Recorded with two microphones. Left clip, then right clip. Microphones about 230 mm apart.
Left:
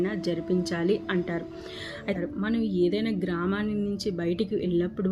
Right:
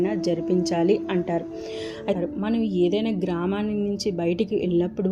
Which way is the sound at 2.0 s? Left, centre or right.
Centre.